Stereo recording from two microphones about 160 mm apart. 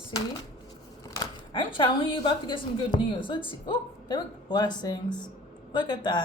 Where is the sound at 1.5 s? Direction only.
30° left (ahead or behind).